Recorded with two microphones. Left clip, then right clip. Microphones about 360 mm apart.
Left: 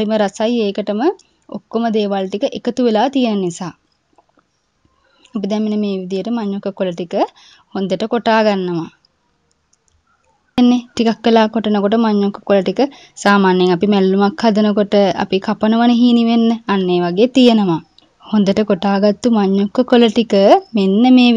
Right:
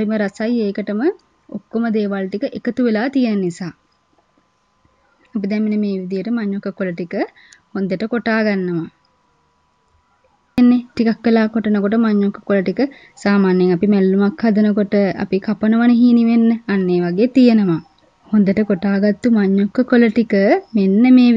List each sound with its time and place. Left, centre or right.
0.0 s speech: left
5.2 s speech: left
10.6 s a woman's voice: left